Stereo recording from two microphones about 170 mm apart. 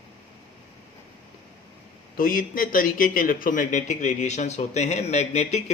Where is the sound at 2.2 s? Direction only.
55° left (ahead or behind).